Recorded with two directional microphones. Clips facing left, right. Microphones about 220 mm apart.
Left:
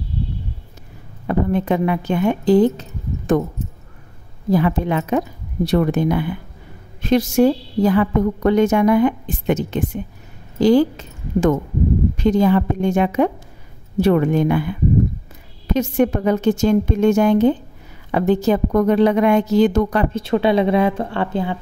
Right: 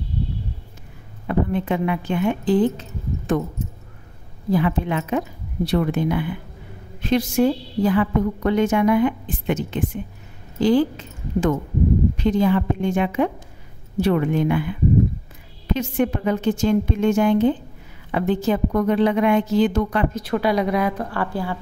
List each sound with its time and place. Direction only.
1.2 s a woman's voice: 45° left (ahead or behind)
4.5 s a woman's voice: 40° left (ahead or behind)
10.6 s a woman's voice: 40° left (ahead or behind)
20.1 s a woman's voice: 25° left (ahead or behind)